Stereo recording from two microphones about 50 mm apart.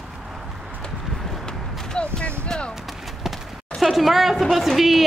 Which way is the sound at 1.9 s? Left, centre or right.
Centre.